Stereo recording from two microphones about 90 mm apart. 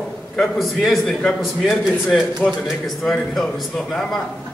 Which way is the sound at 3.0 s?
Centre (ahead or behind).